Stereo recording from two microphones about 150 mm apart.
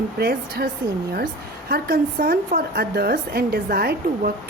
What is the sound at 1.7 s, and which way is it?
Speech, 90° right.